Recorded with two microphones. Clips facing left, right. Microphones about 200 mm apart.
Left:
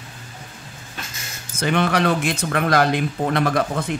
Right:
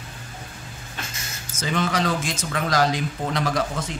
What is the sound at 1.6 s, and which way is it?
Speech, 60° left (ahead or behind).